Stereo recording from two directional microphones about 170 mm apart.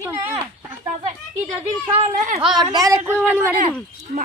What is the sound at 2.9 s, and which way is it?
Speech, 15° right (ahead or behind).